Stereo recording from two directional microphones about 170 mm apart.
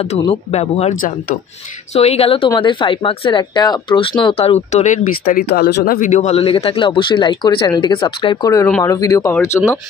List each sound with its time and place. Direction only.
0.0 s speech: 35° left (ahead or behind); by 5.9 s 70° left (ahead or behind)
5.9 s speech: 45° left (ahead or behind); by 9.6 s 15° left (ahead or behind)